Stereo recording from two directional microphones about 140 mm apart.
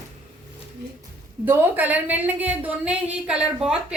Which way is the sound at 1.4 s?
15° right (ahead or behind).